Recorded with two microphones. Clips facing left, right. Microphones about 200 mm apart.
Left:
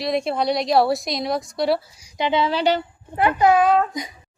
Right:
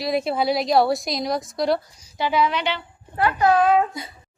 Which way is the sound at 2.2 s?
25° left (ahead or behind).